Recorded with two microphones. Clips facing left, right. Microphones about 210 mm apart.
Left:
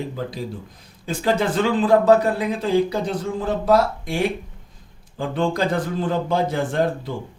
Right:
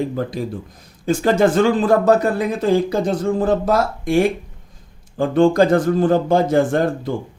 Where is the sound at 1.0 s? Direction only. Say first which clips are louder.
Right 6 dB; 45° right (ahead or behind).